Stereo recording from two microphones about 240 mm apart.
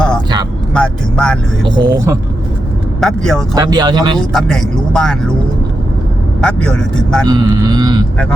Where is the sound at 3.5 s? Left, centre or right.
Centre.